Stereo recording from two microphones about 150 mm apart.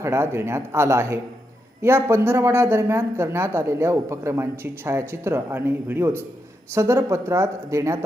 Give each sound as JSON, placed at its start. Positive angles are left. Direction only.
{"t": 0.0, "sound": "a man's voice", "side_deg": -15}